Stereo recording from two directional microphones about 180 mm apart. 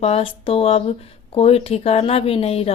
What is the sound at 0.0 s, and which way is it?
Speech, 35° left (ahead or behind).